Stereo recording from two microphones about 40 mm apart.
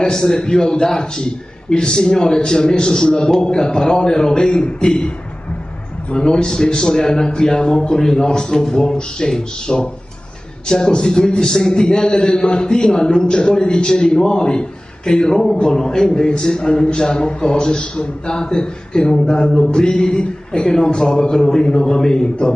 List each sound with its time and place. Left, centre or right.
0.0 s a man's voice: centre
6.1 s a man's voice: left